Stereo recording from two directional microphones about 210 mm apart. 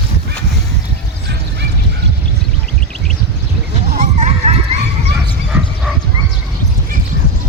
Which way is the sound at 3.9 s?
35° right (ahead or behind).